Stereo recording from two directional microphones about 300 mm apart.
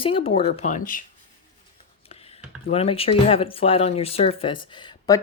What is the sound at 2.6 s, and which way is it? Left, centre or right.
Speech, centre.